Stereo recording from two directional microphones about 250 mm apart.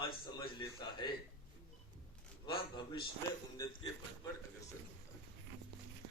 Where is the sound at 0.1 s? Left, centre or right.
Centre.